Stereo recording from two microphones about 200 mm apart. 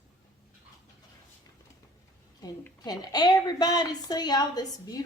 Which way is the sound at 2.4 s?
20° left (ahead or behind).